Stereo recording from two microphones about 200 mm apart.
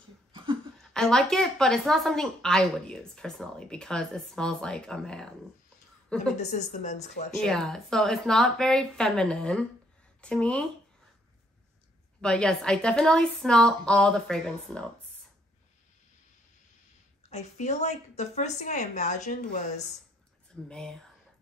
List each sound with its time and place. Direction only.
0.9 s a woman's voice: 5° left (ahead or behind)
6.3 s a woman's voice: 35° left (ahead or behind)
7.3 s a woman's voice: 5° left (ahead or behind)
12.2 s a woman's voice: 5° left (ahead or behind)
17.3 s a woman's voice: 35° left (ahead or behind)
20.6 s a woman's voice: 5° left (ahead or behind)